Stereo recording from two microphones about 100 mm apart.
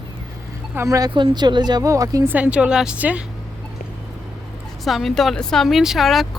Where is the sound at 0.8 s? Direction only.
35° right (ahead or behind).